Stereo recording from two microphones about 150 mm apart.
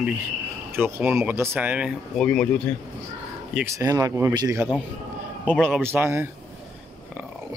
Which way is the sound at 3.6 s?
20° right (ahead or behind).